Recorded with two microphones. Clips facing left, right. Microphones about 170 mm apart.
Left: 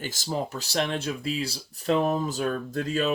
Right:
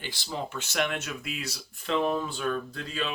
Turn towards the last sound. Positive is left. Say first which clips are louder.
# left 8 dB
turn(degrees=45)  # may be behind; listen again after turning